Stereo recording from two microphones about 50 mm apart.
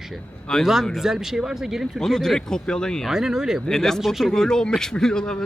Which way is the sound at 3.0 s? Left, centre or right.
Centre.